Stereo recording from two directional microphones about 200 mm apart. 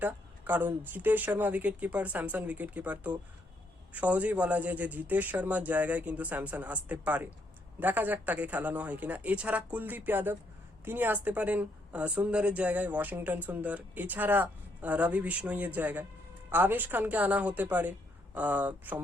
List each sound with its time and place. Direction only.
0.0 s a woman's voice: 10° right (ahead or behind)